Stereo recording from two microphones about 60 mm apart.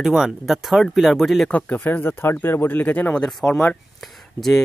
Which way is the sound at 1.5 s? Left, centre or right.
Left.